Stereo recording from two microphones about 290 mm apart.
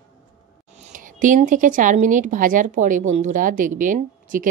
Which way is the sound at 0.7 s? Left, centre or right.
Right.